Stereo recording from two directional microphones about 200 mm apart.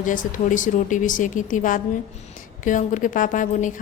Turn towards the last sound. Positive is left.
turn(degrees=40)  # may be behind; listen again after turning